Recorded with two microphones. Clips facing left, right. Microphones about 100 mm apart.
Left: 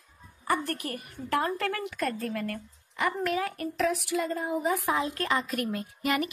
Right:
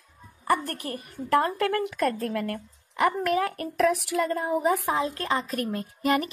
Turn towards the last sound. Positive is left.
turn(degrees=-35)  # may be behind; listen again after turning